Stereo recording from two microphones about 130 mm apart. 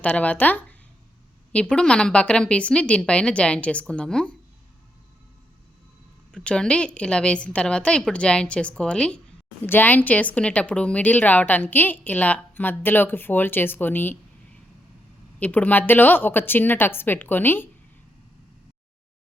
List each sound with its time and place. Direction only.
0.0 s speech: 10° left (ahead or behind)
6.3 s speech: 5° left (ahead or behind)
15.4 s speech: 10° left (ahead or behind)